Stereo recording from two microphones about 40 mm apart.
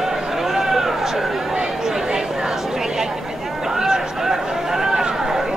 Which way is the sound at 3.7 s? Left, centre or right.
Centre.